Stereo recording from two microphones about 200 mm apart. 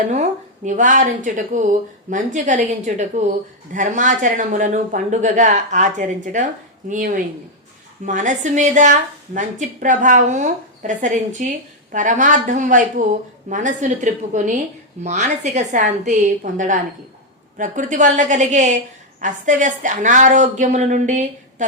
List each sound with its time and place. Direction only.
0.1 s speech: 35° right (ahead or behind)